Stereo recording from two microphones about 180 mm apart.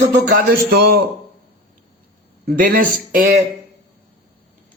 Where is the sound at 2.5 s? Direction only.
55° right (ahead or behind).